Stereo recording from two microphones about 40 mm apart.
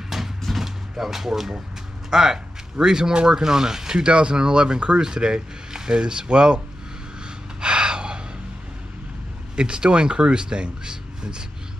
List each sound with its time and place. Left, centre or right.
0.1 s vehicle: centre
2.0 s speech: centre
4.0 s speech: right
7.6 s gasp: right
9.6 s speech: right